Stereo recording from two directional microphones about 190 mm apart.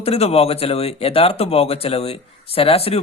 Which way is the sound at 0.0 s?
30° left (ahead or behind).